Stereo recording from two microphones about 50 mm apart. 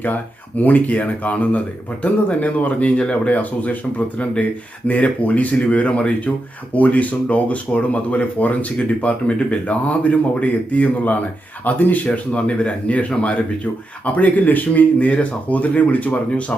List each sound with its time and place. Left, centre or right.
0.0 s speech: left